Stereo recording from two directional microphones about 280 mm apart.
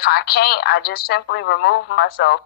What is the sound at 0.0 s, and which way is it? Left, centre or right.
A woman's voice, left.